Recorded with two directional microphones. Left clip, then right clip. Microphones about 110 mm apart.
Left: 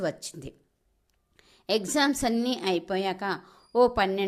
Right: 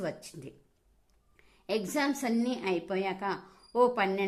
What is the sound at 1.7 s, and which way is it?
A woman's voice, 30° left (ahead or behind).